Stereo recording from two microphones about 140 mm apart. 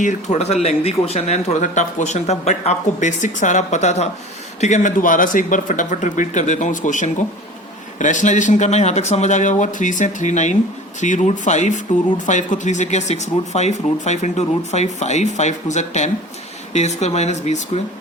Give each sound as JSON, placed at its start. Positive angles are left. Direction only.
{"t": 0.0, "sound": "speech", "side_deg": 60}